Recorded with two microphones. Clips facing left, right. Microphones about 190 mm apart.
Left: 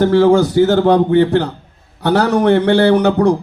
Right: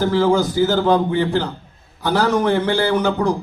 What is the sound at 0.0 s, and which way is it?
A man's voice, 65° left (ahead or behind).